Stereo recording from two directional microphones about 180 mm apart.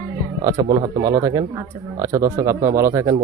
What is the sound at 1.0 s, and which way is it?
Speech, 20° right (ahead or behind).